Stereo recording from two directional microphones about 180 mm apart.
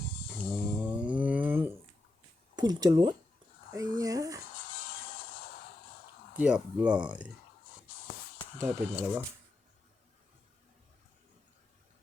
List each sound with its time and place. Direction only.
0.3 s snoring: 5° right (ahead or behind)
2.6 s speech: 20° right (ahead or behind)
3.7 s a sound: 20° right (ahead or behind)
6.3 s speech: 5° right (ahead or behind)
8.5 s speech: 15° right (ahead or behind)